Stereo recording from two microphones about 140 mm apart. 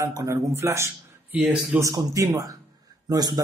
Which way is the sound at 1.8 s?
25° right (ahead or behind).